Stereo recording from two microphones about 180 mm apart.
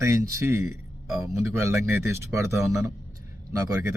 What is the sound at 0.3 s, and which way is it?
Speech, 15° right (ahead or behind).